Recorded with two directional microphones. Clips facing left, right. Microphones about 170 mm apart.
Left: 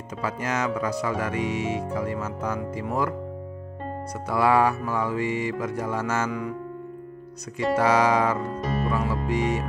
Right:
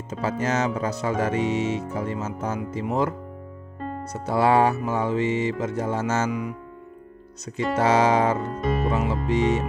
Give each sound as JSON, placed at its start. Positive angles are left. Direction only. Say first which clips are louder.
{"t": 0.1, "sound": "speech", "louder": "right 3 dB", "side_deg": -25}
{"t": 7.5, "sound": "speech", "louder": "right 1 dB", "side_deg": -25}
{"t": 8.5, "sound": "music", "louder": "right 3 dB", "side_deg": 0}
{"t": 8.8, "sound": "speech", "louder": "right 2 dB", "side_deg": -25}